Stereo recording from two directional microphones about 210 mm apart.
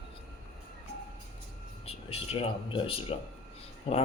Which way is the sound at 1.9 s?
25° left (ahead or behind).